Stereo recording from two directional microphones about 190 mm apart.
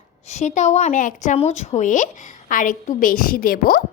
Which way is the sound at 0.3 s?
40° left (ahead or behind).